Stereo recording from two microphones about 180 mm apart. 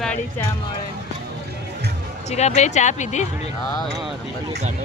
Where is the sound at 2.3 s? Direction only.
40° left (ahead or behind).